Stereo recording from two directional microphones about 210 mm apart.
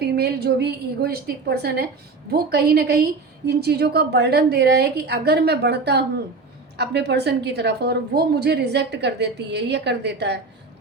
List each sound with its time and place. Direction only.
0.0 s a woman's voice: 50° right (ahead or behind)